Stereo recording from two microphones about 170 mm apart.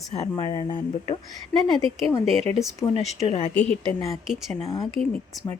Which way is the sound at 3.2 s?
40° left (ahead or behind).